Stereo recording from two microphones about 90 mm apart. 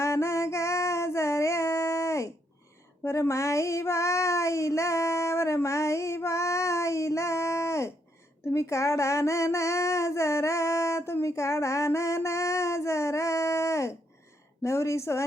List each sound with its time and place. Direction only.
0.0 s music: 30° left (ahead or behind)
3.0 s child singing: 30° left (ahead or behind)
8.5 s a sound: 35° left (ahead or behind)
14.6 s a woman's voice: 35° left (ahead or behind)